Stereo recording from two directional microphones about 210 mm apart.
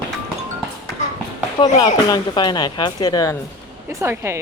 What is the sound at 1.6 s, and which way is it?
Speech, 20° left (ahead or behind).